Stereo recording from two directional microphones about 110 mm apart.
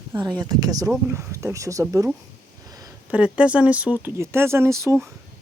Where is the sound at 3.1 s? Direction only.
10° right (ahead or behind).